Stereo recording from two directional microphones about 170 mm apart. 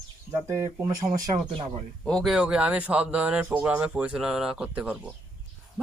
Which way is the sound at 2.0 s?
Centre (ahead or behind).